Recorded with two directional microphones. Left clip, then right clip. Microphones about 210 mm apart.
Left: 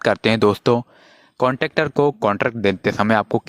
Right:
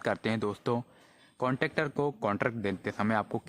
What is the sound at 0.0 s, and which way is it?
Speech, 35° left (ahead or behind).